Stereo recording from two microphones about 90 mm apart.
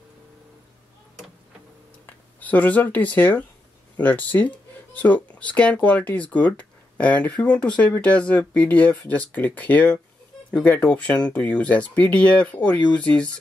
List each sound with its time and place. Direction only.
2.0 s speech: 20° left (ahead or behind)